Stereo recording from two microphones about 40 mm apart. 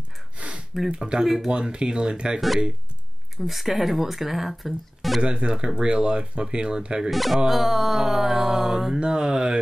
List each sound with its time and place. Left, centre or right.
0.8 s speech: right
1.2 s mantra: centre
1.5 s speech: right
3.3 s speech: centre
5.2 s speech: right
7.1 s speech: centre
7.4 s mantra: centre
9.0 s speech: right